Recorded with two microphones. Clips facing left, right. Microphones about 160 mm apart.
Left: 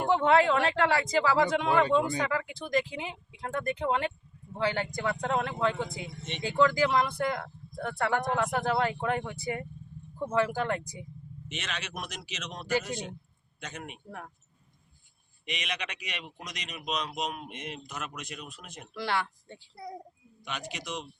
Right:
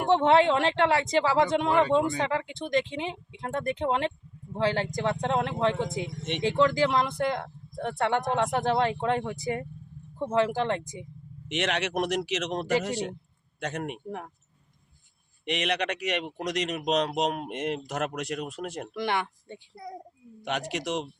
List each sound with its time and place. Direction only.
0.0 s speech: 25° right (ahead or behind)
11.4 s speech: 70° right (ahead or behind)
15.4 s speech: 65° right (ahead or behind)
18.9 s speech: 20° right (ahead or behind)
20.4 s speech: 70° right (ahead or behind)